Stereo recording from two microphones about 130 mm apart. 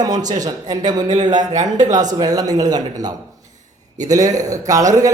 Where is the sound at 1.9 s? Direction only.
30° right (ahead or behind).